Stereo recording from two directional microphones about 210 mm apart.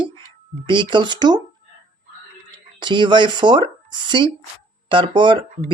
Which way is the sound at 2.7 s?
20° right (ahead or behind).